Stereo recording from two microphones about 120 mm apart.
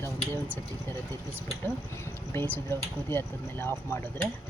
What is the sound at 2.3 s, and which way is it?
Speech, 20° left (ahead or behind).